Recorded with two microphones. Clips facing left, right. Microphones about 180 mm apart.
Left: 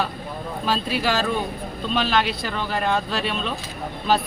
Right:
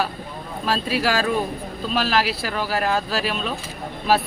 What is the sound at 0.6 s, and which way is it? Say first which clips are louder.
Speech: right 2 dB; centre (ahead or behind).